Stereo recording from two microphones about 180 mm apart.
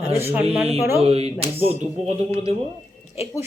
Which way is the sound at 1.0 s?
35° right (ahead or behind).